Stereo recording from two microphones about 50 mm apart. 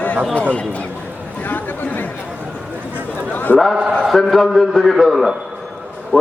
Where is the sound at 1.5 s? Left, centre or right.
Left.